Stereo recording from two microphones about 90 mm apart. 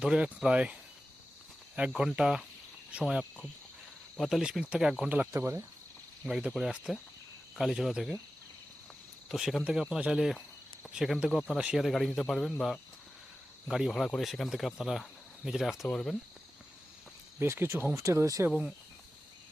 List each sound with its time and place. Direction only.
0.0 s speech: 10° right (ahead or behind)
2.0 s speech: 10° right (ahead or behind)
5.3 s speech: 30° right (ahead or behind)
6.2 s speech: 5° right (ahead or behind)
9.3 s speech: 5° right (ahead or behind)
17.4 s speech: 25° right (ahead or behind)